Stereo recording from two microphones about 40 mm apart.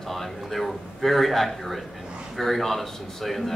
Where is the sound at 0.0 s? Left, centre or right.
Centre.